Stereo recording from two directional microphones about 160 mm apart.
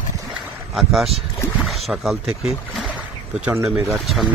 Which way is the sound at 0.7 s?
Centre (ahead or behind).